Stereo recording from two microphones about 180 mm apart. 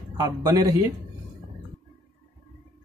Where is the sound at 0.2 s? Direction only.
20° right (ahead or behind).